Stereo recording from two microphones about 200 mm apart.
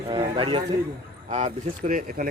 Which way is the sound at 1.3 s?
40° right (ahead or behind).